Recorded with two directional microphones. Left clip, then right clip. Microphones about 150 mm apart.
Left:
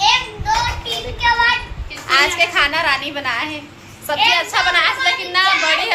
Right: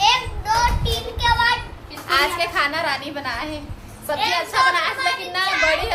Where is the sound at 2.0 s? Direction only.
35° left (ahead or behind).